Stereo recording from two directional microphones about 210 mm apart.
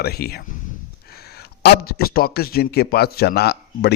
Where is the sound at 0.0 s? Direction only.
45° left (ahead or behind).